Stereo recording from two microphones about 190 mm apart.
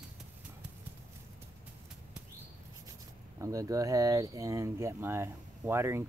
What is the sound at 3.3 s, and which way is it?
Speech, 15° right (ahead or behind).